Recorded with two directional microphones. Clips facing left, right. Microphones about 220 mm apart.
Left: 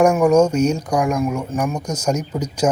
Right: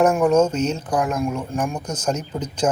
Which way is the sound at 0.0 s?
10° left (ahead or behind).